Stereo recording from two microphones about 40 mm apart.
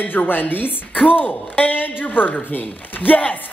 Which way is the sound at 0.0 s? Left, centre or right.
Left.